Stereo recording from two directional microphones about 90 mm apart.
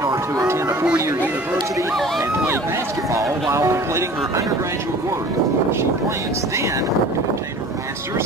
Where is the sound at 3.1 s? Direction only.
35° right (ahead or behind).